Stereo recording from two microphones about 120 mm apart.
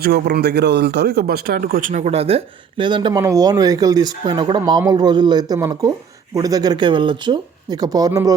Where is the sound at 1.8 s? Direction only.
85° right; by 3.1 s 40° right (ahead or behind).